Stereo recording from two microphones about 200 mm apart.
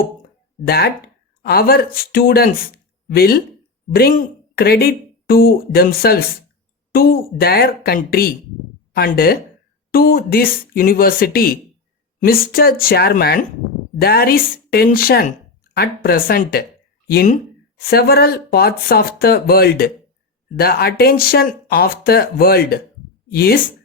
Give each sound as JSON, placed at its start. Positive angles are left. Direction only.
{"t": 0.7, "sound": "speech", "side_deg": 50}